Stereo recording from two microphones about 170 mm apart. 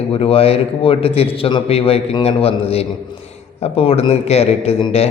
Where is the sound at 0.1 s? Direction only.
35° left (ahead or behind).